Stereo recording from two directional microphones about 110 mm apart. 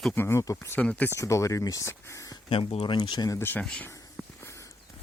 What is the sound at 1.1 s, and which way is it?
Speech, 30° left (ahead or behind).